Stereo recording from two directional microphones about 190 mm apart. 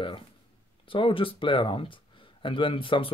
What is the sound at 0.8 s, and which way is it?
Speech, 25° left (ahead or behind).